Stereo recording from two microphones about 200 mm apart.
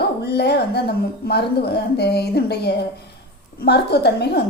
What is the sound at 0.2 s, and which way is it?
A woman's voice, 55° left (ahead or behind).